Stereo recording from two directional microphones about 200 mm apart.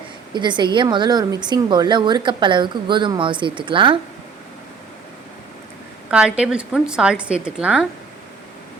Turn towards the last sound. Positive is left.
turn(degrees=-5)  # may be behind; listen again after turning